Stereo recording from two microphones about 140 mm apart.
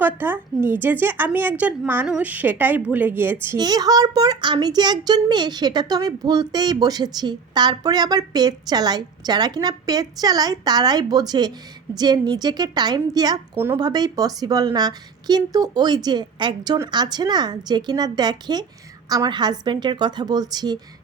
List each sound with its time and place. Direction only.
0.0 s a woman's voice: 15° right (ahead or behind)
3.6 s a child's voice: 30° right (ahead or behind)